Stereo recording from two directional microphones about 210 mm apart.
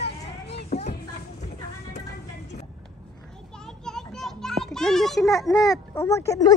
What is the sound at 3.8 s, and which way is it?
Children playing, centre (ahead or behind).